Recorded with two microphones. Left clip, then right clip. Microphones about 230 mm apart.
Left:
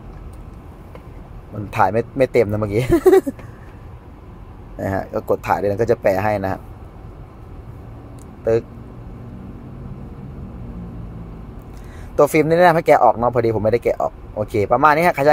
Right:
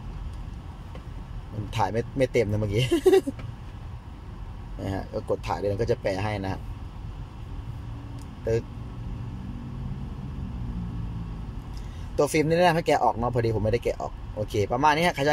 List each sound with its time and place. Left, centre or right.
1.8 s speech: centre
4.7 s speech: centre
12.2 s speech: centre